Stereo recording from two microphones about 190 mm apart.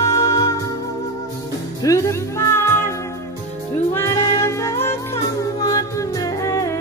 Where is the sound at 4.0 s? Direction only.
15° left (ahead or behind).